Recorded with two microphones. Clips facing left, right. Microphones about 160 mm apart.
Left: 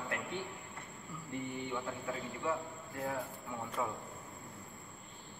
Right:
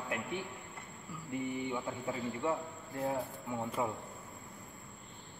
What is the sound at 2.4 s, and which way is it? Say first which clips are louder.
A man's voice: right 2 dB; 25° right (ahead or behind).